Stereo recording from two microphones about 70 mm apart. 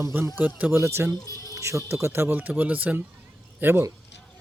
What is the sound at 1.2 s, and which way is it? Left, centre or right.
Speech, left.